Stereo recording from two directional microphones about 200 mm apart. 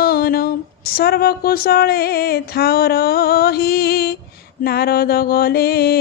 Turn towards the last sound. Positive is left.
turn(degrees=50)  # may be behind; listen again after turning